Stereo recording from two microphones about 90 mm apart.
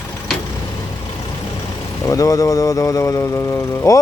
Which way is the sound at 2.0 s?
40° left (ahead or behind).